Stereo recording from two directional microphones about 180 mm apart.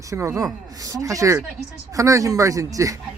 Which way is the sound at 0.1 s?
15° right (ahead or behind).